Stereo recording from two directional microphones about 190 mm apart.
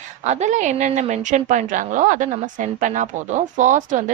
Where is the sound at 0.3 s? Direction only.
40° right (ahead or behind).